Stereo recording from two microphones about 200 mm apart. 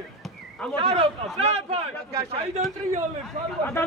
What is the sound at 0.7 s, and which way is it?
A man's voice, 30° right (ahead or behind).